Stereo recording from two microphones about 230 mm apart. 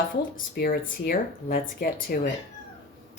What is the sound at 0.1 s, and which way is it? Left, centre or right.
Speech, left.